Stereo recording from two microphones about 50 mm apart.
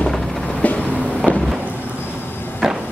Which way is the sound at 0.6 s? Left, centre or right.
Left.